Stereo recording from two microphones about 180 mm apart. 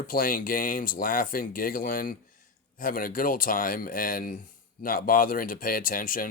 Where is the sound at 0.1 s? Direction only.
50° left (ahead or behind).